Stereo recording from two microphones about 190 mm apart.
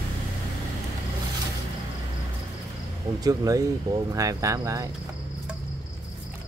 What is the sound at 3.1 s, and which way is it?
Speech, 20° right (ahead or behind).